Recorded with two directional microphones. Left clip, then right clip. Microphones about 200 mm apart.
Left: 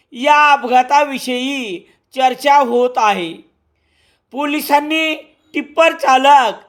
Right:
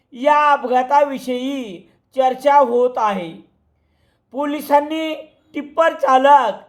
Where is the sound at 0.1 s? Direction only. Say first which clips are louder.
Left 3 dB; 25° left (ahead or behind).